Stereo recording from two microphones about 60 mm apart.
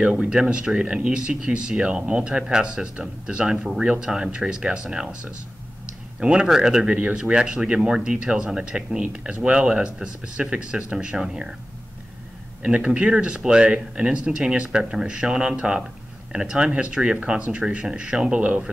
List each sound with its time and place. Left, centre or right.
0.0 s speech: centre
6.9 s speech: right
12.6 s speech: centre